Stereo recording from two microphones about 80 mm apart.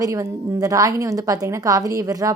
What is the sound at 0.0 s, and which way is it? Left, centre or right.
A woman's voice, right.